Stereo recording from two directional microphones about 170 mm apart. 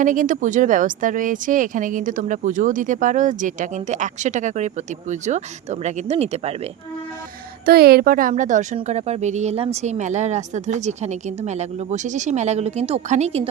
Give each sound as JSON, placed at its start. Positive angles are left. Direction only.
{"t": 0.0, "sound": "speech", "side_deg": -50}
{"t": 7.6, "sound": "speech", "side_deg": -65}